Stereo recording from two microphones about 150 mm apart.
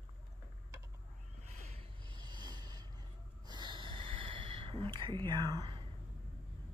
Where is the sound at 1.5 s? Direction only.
45° right (ahead or behind).